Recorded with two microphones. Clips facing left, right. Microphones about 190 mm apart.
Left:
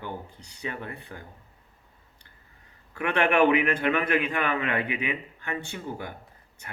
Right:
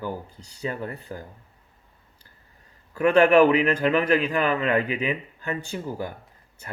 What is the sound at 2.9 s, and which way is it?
A man's voice, 40° right (ahead or behind).